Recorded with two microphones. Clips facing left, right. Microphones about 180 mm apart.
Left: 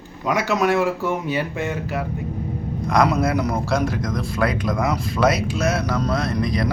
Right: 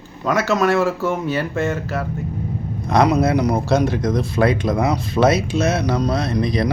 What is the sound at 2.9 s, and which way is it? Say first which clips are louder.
Speech: right 3 dB; 25° right (ahead or behind).